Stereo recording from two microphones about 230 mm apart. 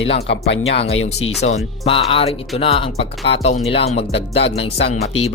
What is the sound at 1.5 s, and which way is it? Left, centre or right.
Speech, left.